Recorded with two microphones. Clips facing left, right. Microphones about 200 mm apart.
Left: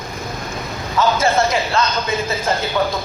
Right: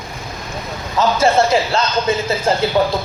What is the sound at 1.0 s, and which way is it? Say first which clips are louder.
Speech: right 2 dB; 30° right (ahead or behind).